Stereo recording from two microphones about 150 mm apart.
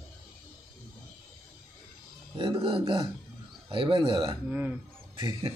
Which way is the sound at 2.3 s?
35° right (ahead or behind).